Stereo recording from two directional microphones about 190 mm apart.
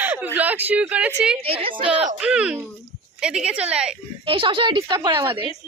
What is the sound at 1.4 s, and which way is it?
Speech, 30° right (ahead or behind).